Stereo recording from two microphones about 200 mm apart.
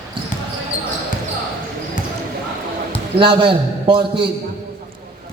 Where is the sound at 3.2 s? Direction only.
25° right (ahead or behind).